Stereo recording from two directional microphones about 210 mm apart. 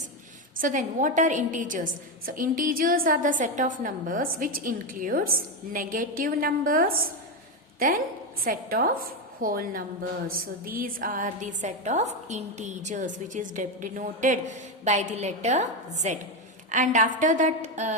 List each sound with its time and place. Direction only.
0.6 s a woman's voice: 40° right (ahead or behind)